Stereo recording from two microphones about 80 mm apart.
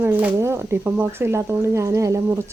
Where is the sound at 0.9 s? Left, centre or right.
Right.